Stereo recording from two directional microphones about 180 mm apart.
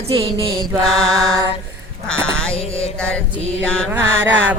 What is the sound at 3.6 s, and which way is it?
Mantra, 5° left (ahead or behind).